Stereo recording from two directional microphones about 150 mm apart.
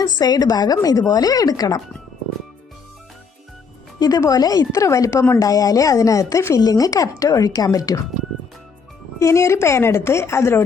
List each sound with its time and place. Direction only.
0.0 s speech: 25° left (ahead or behind)
4.0 s speech: 25° left (ahead or behind)
9.1 s speech: 20° left (ahead or behind)